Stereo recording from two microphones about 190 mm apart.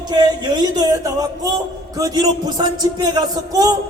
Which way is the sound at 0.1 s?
20° right (ahead or behind).